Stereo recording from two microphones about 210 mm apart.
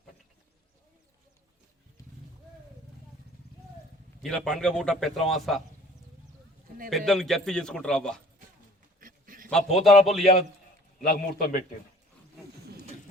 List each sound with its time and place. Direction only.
4.2 s a man's voice: 5° left (ahead or behind)
6.9 s a man's voice: centre (ahead or behind)
9.0 s a sound: 40° right (ahead or behind)
9.5 s a man's voice: centre (ahead or behind)
11.0 s a man's voice: 45° left (ahead or behind)